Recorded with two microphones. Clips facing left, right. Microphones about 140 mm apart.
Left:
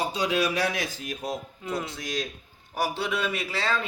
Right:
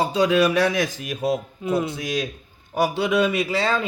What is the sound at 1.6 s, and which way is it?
Speech, 20° right (ahead or behind).